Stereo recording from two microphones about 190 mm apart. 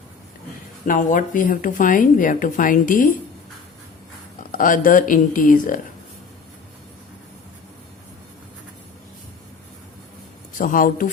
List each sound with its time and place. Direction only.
0.9 s speech: 45° left (ahead or behind)
4.5 s speech: 45° left (ahead or behind)
10.6 s speech: 45° left (ahead or behind)